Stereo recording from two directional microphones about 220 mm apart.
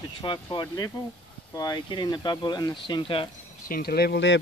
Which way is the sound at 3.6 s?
40° left (ahead or behind).